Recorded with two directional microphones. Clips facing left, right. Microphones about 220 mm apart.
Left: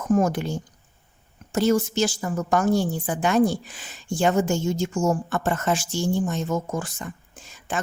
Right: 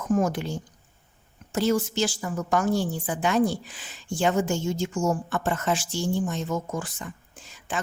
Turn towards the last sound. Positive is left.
turn(degrees=45)  # may be behind; listen again after turning